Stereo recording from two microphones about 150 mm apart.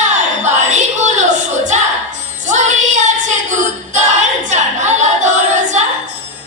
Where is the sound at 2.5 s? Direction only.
50° right (ahead or behind).